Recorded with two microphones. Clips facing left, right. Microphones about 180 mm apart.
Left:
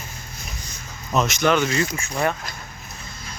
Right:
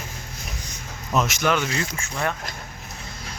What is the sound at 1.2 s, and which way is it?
Speech, 5° right (ahead or behind).